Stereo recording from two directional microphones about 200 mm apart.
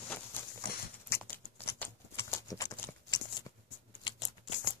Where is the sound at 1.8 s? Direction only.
10° left (ahead or behind).